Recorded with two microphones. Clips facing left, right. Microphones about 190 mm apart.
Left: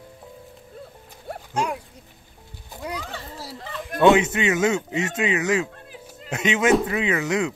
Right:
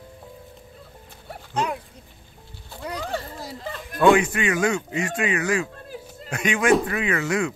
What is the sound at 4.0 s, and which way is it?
Speech, 25° left (ahead or behind).